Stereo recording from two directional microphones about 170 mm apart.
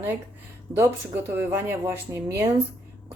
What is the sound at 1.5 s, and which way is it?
A woman's voice, 15° right (ahead or behind).